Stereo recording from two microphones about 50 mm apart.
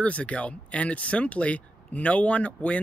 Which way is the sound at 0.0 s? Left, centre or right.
Left.